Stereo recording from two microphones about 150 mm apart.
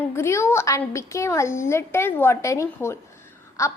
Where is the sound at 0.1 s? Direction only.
20° left (ahead or behind).